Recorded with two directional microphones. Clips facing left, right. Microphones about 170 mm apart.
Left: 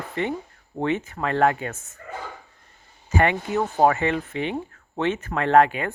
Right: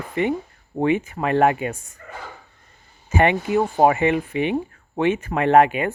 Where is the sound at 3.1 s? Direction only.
20° right (ahead or behind).